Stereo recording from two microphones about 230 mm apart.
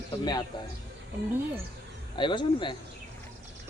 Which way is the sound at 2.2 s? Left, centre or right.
Left.